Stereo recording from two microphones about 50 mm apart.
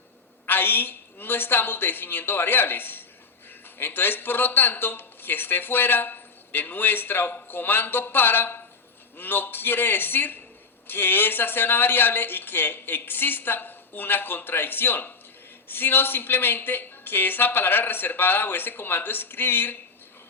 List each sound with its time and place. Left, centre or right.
0.4 s speech: left